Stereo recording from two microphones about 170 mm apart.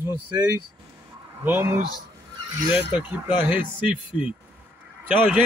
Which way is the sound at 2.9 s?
10° right (ahead or behind).